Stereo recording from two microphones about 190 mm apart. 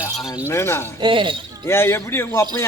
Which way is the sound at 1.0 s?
25° right (ahead or behind).